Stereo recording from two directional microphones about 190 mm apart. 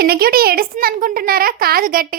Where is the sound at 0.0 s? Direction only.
55° right (ahead or behind).